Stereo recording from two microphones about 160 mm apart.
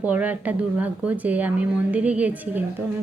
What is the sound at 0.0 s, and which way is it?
A woman's voice, 10° right (ahead or behind).